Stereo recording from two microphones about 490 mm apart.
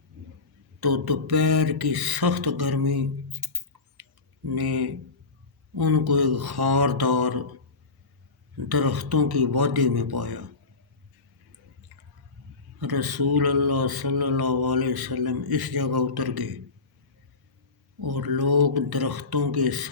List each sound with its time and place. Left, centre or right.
0.8 s mantra: right
8.7 s mantra: right
11.9 s drip: right
12.8 s mantra: right
18.0 s mantra: right